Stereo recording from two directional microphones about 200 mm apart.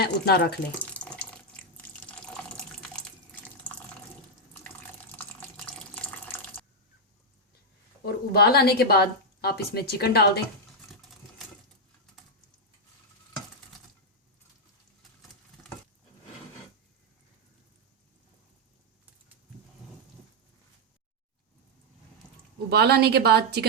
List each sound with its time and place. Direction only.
0.0 s speech: 55° left (ahead or behind)
0.8 s water: 5° left (ahead or behind)
5.1 s water: 5° left (ahead or behind)
8.0 s a woman's voice: 50° left (ahead or behind)
22.7 s a woman's voice: 50° right (ahead or behind)